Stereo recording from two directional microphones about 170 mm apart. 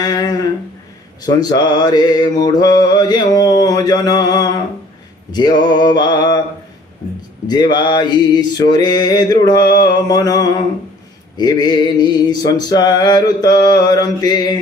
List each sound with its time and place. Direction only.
0.0 s humming: 20° left (ahead or behind)
1.2 s mantra: 25° left (ahead or behind)
7.4 s mantra: 25° left (ahead or behind)